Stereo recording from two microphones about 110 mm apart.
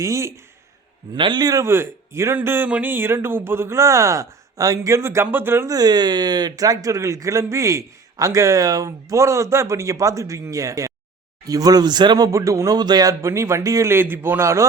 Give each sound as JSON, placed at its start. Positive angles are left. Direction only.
{"t": 0.0, "sound": "speech", "side_deg": -25}
{"t": 1.1, "sound": "speech", "side_deg": -45}
{"t": 1.6, "sound": "speech", "side_deg": -20}
{"t": 5.6, "sound": "speech", "side_deg": -35}